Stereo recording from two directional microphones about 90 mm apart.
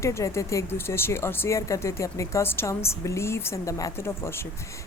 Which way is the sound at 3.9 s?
30° left (ahead or behind).